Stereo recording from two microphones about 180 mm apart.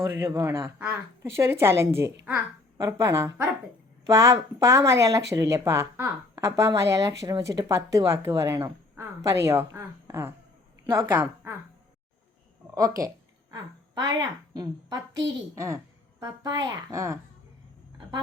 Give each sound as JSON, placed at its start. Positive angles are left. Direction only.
{"t": 0.0, "sound": "a woman's voice", "side_deg": -15}
{"t": 12.7, "sound": "a woman's voice", "side_deg": -20}